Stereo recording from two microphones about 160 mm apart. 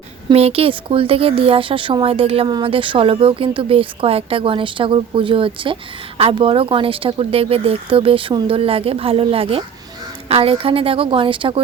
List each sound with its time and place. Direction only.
0.3 s speech: 40° right (ahead or behind)